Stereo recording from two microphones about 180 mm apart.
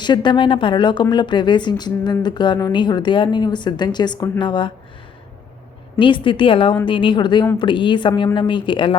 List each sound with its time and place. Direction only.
0.0 s speech: 25° left (ahead or behind)
6.0 s speech: 25° left (ahead or behind)